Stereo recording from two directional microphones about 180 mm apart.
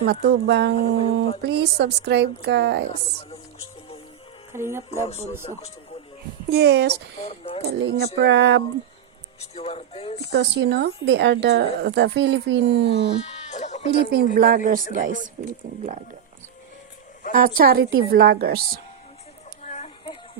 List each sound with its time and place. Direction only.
0.0 s speech: 65° right (ahead or behind)
4.5 s speech: 15° right (ahead or behind)
5.0 s speech: 35° left (ahead or behind)
6.5 s speech: 65° right (ahead or behind)
6.9 s speech: 35° left (ahead or behind)
7.7 s speech: 65° right (ahead or behind)
9.4 s speech: 35° left (ahead or behind)
10.3 s speech: 70° right (ahead or behind)
13.2 s sheep: 40° left (ahead or behind)
13.9 s a woman's voice: 60° right (ahead or behind); by 16.0 s 40° right (ahead or behind)
17.3 s a woman's voice: 50° right (ahead or behind)
19.6 s a sound: 40° left (ahead or behind)